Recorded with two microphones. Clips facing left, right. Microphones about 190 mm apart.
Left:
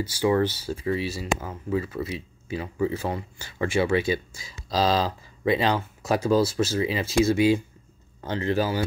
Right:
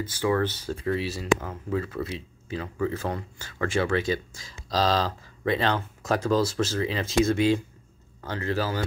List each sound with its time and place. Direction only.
0.0 s speech: 10° left (ahead or behind)
8.2 s speech: 20° left (ahead or behind)